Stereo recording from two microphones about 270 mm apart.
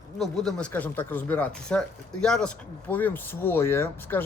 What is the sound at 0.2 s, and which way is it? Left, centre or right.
Speech, centre.